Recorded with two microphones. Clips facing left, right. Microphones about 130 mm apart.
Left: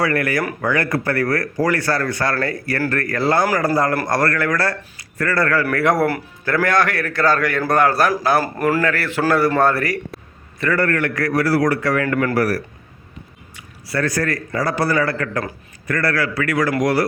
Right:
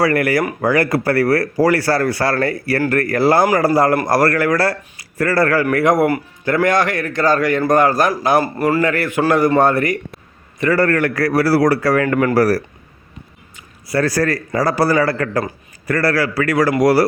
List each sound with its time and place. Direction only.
0.0 s speech: 30° right (ahead or behind)
5.8 s a man's voice: 15° right (ahead or behind)
10.8 s speech: 35° right (ahead or behind)
13.9 s speech: 35° right (ahead or behind)